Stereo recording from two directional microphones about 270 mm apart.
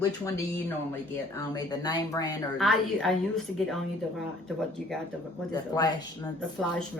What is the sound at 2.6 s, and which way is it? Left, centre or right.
A woman's voice, centre.